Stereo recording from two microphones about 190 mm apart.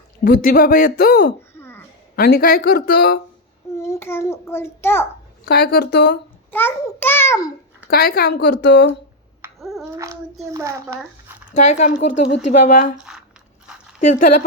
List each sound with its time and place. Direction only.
0.3 s speech: 50° left (ahead or behind)
1.4 s cough: 10° left (ahead or behind)
2.1 s speech: 55° left (ahead or behind)
3.8 s a child's voice: 15° left (ahead or behind)
5.5 s speech: 55° left (ahead or behind)
6.5 s a child's voice: 10° left (ahead or behind)
7.9 s speech: 55° left (ahead or behind)
9.6 s a sound: centre (ahead or behind)
9.9 s a child's voice: 15° right (ahead or behind)
11.5 s speech: 35° left (ahead or behind)
14.1 s speech: 40° left (ahead or behind)